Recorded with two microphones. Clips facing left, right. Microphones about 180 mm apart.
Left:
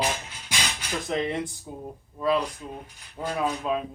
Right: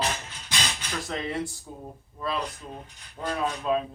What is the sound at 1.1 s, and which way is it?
Speech, 20° left (ahead or behind).